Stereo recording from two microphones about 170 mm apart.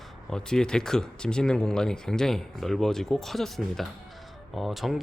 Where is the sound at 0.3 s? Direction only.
5° left (ahead or behind).